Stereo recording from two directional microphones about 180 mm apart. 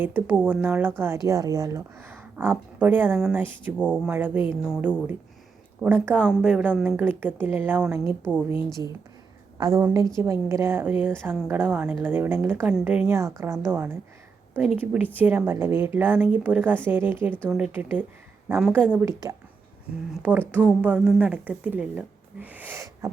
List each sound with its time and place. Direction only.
0.0 s speech: 10° right (ahead or behind)
3.8 s a woman's voice: 5° left (ahead or behind)
4.0 s speech: 10° right (ahead or behind)
5.8 s speech: 10° right (ahead or behind)
8.2 s a woman's voice: 5° left (ahead or behind)
8.4 s speech: 15° right (ahead or behind)
17.3 s a woman's voice: 5° left (ahead or behind)
17.6 s speech: 10° right (ahead or behind)
20.8 s speech: 10° right (ahead or behind)